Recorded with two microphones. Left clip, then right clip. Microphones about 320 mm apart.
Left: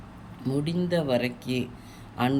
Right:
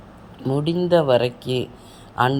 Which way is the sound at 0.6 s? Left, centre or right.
Centre.